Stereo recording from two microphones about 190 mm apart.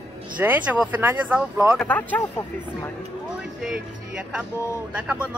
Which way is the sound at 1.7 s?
5° left (ahead or behind).